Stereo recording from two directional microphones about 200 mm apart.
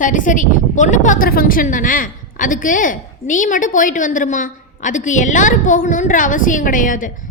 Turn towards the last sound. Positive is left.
turn(degrees=40)  # may be behind; listen again after turning